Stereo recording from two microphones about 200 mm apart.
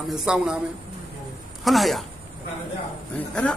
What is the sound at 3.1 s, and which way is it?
Speech, 5° left (ahead or behind).